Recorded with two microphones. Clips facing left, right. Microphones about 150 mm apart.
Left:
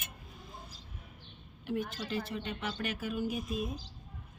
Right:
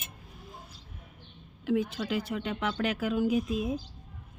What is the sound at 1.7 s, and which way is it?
Speech, 90° right.